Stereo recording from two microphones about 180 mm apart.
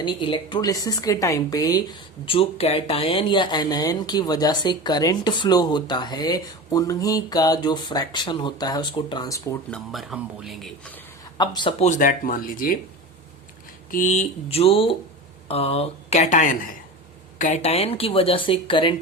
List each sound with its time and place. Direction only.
0.0 s a woman's voice: 25° left (ahead or behind)
9.6 s speech: centre (ahead or behind)
11.3 s a woman's voice: 25° left (ahead or behind)
11.8 s speech: 45° left (ahead or behind)
13.9 s speech: 45° left (ahead or behind); by 18.9 s 25° left (ahead or behind)